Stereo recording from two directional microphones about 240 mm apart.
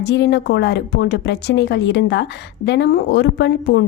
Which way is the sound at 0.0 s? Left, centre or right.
Left.